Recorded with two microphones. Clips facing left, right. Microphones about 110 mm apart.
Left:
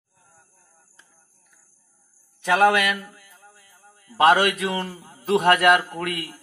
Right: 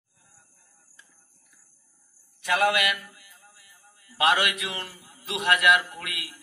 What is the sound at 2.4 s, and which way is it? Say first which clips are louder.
Mantra: left 6 dB; 40° left (ahead or behind).